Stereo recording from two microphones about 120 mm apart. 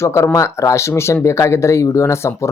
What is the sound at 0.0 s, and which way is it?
A man's voice, 25° left (ahead or behind).